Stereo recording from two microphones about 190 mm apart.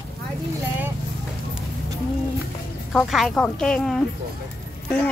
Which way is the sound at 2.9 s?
Centre (ahead or behind).